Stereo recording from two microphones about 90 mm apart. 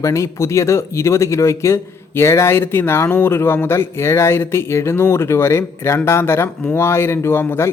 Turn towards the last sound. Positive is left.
turn(degrees=25)  # may be behind; listen again after turning